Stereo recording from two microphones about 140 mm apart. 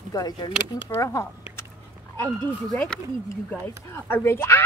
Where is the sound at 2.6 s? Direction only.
5° left (ahead or behind).